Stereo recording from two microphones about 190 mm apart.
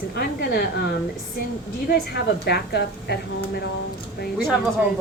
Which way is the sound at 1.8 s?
55° left (ahead or behind).